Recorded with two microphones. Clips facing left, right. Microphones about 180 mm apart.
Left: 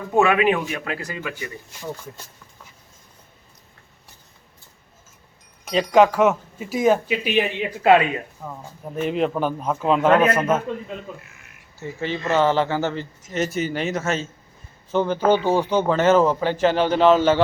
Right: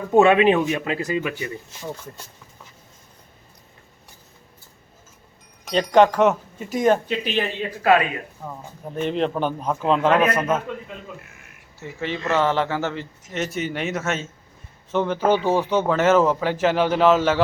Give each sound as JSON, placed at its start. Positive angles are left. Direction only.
{"t": 0.1, "sound": "speech", "side_deg": -25}
{"t": 5.7, "sound": "speech", "side_deg": 5}
{"t": 9.0, "sound": "speech", "side_deg": 5}
{"t": 11.8, "sound": "speech", "side_deg": 0}